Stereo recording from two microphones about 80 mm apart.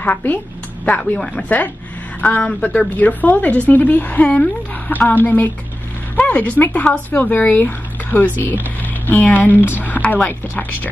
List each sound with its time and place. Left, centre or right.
0.0 s speech: left